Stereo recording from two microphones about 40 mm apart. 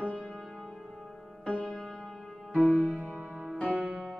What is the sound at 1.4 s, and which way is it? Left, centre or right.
Music, left.